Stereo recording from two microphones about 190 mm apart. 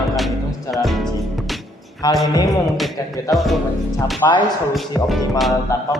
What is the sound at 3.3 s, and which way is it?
Speech, 20° left (ahead or behind).